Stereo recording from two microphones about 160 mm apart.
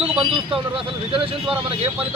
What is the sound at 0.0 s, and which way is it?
Speech, 35° right (ahead or behind).